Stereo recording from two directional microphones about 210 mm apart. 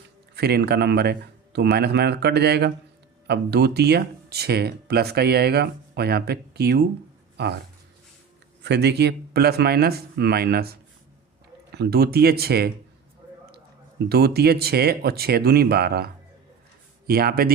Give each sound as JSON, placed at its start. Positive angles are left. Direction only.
{"t": 0.3, "sound": "speech", "side_deg": -50}
{"t": 8.6, "sound": "speech", "side_deg": -55}
{"t": 11.7, "sound": "speech", "side_deg": -50}
{"t": 14.1, "sound": "speech", "side_deg": -50}
{"t": 17.1, "sound": "speech", "side_deg": -45}